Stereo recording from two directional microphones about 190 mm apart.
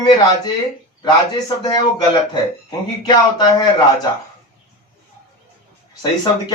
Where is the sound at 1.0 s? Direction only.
20° left (ahead or behind).